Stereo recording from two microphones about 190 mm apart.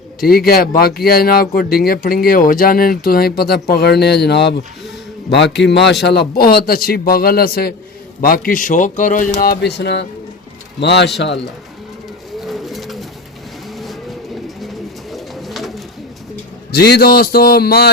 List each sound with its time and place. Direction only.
0.3 s speech: 55° left (ahead or behind)
5.6 s speech: 65° left (ahead or behind); by 9.3 s 45° left (ahead or behind)
9.4 s speech: 55° left (ahead or behind)
12.4 s bird: centre (ahead or behind)
15.1 s bird: centre (ahead or behind)
16.7 s speech: 55° left (ahead or behind)